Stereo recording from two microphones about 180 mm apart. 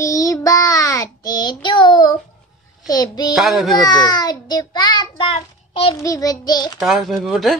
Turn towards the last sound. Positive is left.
turn(degrees=0)  # may be behind; listen again after turning